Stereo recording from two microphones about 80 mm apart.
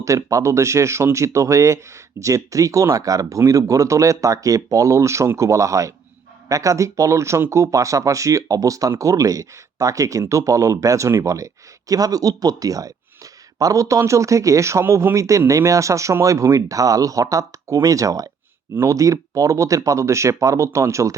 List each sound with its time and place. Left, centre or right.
0.0 s speech: right